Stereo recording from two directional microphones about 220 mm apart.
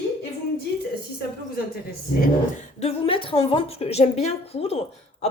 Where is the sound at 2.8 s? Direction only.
25° left (ahead or behind).